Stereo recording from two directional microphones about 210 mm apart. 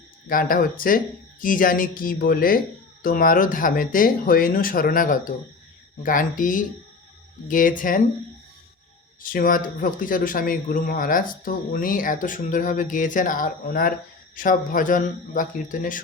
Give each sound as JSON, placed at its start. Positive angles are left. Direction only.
{"t": 0.3, "sound": "a man's voice", "side_deg": 40}
{"t": 9.2, "sound": "a man's voice", "side_deg": 40}